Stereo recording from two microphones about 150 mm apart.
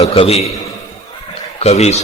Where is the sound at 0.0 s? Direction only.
40° left (ahead or behind).